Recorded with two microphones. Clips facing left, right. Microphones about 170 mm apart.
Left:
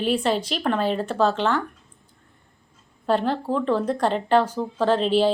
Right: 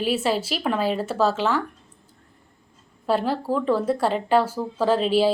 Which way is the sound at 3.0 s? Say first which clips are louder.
Even; 5° right (ahead or behind).